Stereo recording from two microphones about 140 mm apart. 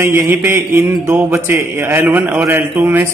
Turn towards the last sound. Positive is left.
turn(degrees=-15)  # may be behind; listen again after turning